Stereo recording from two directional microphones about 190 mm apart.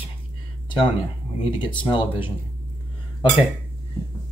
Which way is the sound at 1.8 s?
25° left (ahead or behind).